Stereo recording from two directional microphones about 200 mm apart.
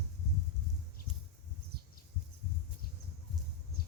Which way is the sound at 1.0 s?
50° left (ahead or behind).